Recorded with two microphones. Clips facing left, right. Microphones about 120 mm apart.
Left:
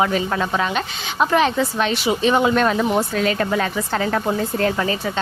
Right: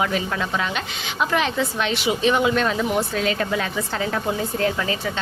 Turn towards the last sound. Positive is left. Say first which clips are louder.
# left 3 dB
turn(degrees=40)  # may be behind; listen again after turning